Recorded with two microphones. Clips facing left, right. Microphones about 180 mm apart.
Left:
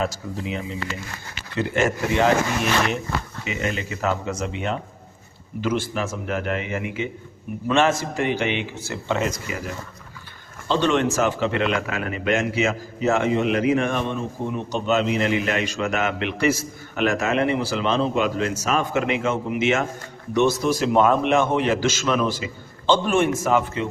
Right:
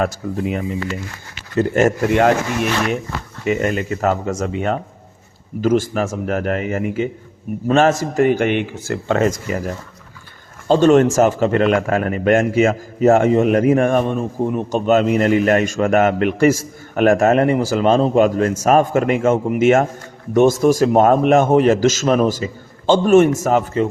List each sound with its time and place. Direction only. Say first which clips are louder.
0.0 s speech: right 6 dB; 55° right (ahead or behind)
3.4 s speech: right 12 dB; 50° right (ahead or behind)